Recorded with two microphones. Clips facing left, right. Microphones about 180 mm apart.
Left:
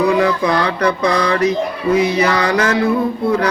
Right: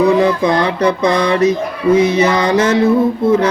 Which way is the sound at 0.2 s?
25° right (ahead or behind).